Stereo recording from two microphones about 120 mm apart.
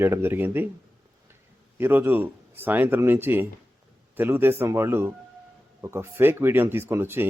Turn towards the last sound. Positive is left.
turn(degrees=-20)  # may be behind; listen again after turning